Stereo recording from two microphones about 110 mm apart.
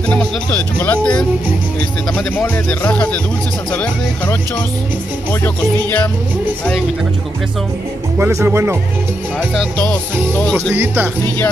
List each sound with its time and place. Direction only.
0.1 s speech: 10° left (ahead or behind)
5.4 s speech: 15° left (ahead or behind)
8.2 s speech: 25° right (ahead or behind)
10.7 s speech: 20° right (ahead or behind)